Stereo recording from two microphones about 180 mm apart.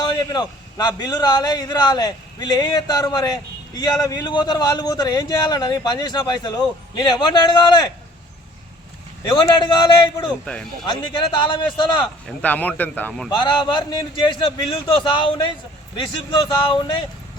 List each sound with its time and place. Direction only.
0.0 s a man's voice: 25° left (ahead or behind)
9.3 s a man's voice: 25° left (ahead or behind)
10.2 s speech: 5° left (ahead or behind)
11.4 s a man's voice: 25° left (ahead or behind)
12.4 s speech: 10° left (ahead or behind)
13.3 s a man's voice: 25° left (ahead or behind)